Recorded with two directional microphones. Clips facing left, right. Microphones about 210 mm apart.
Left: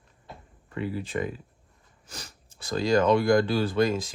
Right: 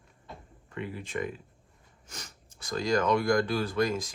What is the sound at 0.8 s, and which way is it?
Speech, 35° left (ahead or behind).